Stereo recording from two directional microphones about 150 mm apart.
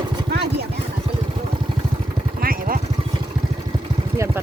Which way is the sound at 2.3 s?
70° right (ahead or behind).